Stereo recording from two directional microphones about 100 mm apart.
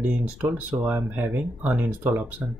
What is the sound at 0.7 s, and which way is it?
Speech, 30° right (ahead or behind).